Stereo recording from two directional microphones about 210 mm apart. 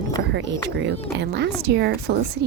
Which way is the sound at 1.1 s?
55° right (ahead or behind).